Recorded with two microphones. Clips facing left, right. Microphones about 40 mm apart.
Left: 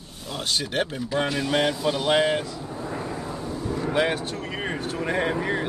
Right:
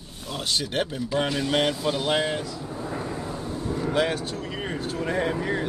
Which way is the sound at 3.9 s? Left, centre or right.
Left.